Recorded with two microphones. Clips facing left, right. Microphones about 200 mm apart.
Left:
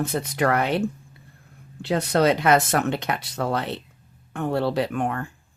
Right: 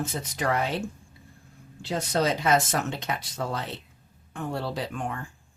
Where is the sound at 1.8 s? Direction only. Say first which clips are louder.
Left 6 dB; 60° left (ahead or behind).